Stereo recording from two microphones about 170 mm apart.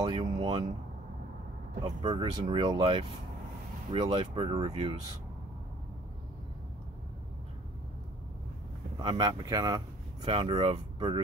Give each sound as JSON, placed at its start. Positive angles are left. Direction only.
{"t": 0.0, "sound": "speech", "side_deg": -25}
{"t": 1.8, "sound": "speech", "side_deg": -25}
{"t": 8.9, "sound": "speech", "side_deg": -25}